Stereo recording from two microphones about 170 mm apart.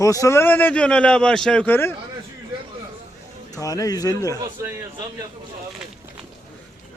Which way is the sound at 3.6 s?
20° left (ahead or behind).